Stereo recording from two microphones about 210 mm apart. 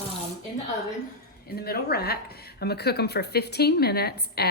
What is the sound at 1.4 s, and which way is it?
Speech, 50° left (ahead or behind).